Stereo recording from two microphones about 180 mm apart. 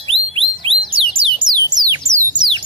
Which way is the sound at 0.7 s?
30° right (ahead or behind).